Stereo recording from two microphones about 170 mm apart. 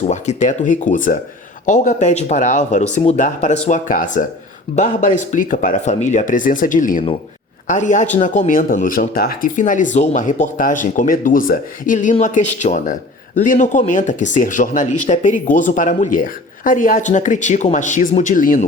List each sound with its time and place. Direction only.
0.1 s speech: 45° left (ahead or behind)